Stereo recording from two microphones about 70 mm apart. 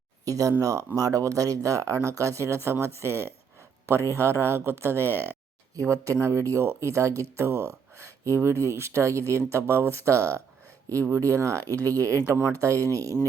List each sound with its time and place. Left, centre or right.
0.3 s speech: right
5.7 s speech: right